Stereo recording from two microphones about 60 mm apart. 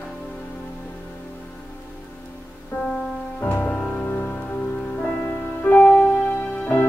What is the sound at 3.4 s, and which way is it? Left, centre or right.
Music, left.